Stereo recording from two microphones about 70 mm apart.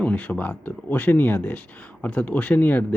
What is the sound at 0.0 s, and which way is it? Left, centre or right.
Speech, left.